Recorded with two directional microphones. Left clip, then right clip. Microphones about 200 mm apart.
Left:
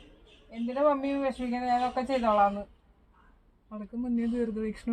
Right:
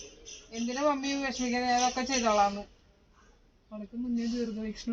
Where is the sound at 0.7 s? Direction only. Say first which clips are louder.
Left 3 dB; 35° left (ahead or behind).